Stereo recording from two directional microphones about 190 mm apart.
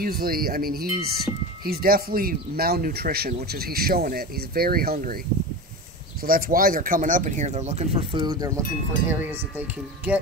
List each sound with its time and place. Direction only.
0.0 s speech: 50° right (ahead or behind)
6.2 s speech: 50° right (ahead or behind); by 9.1 s 15° right (ahead or behind)